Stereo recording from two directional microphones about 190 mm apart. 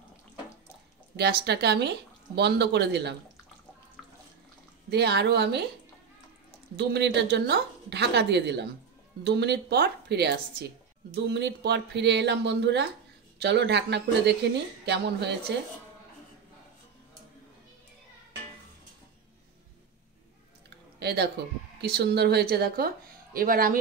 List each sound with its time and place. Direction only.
1.1 s speech: 60° right (ahead or behind)
4.8 s speech: 60° right (ahead or behind)
6.8 s speech: 60° right (ahead or behind)
21.0 s a sound: 55° right (ahead or behind)
21.8 s speech: 60° right (ahead or behind)